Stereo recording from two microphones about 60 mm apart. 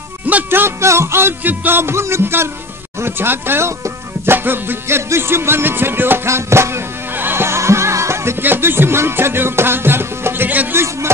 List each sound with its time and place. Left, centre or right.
0.5 s music: right
1.4 s music: right
6.2 s music: right
8.4 s music: right
10.7 s music: right